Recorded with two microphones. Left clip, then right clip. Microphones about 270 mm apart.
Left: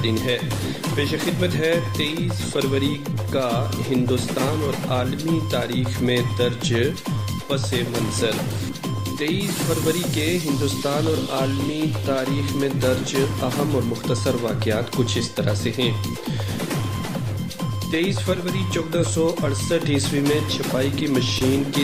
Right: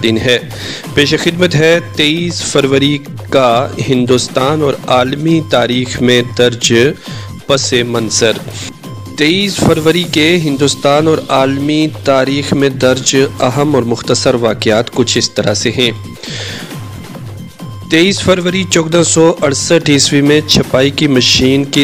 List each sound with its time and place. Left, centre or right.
0.0 s speech: right
17.9 s speech: right